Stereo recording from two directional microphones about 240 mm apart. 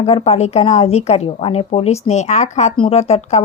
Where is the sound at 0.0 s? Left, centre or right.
Left.